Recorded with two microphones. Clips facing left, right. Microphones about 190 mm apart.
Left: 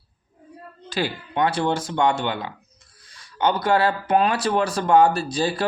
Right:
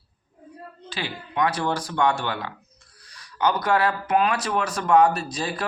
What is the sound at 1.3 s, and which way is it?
Speech, 30° left (ahead or behind).